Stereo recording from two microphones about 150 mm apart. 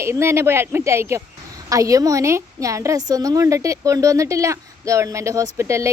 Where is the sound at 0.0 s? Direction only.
15° right (ahead or behind).